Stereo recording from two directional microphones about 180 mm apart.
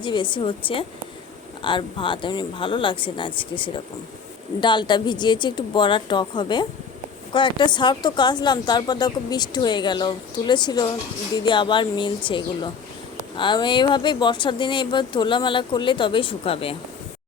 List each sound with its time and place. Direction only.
0.0 s speech: 25° left (ahead or behind)